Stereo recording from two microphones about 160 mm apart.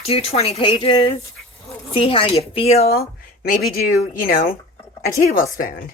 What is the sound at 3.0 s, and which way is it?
A woman's voice, 65° left (ahead or behind).